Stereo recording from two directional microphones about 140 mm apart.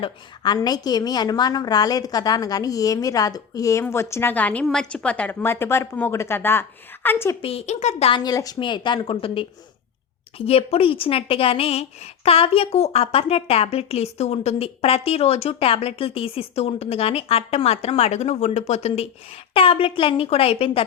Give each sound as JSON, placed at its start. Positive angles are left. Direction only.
{"t": 0.0, "sound": "a woman's voice", "side_deg": 30}
{"t": 7.4, "sound": "a woman's voice", "side_deg": 50}
{"t": 8.2, "sound": "a woman's voice", "side_deg": 25}
{"t": 19.5, "sound": "a woman's voice", "side_deg": 40}